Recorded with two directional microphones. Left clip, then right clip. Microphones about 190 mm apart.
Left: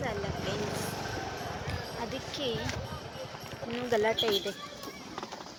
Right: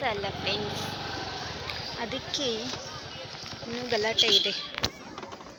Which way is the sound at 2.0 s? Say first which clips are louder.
Right 5 dB; 15° right (ahead or behind).